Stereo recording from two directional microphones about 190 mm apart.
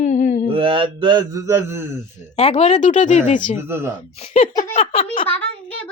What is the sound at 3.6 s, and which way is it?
Speech, 10° right (ahead or behind).